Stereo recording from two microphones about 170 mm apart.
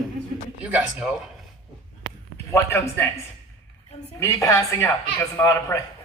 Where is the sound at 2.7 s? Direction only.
15° left (ahead or behind).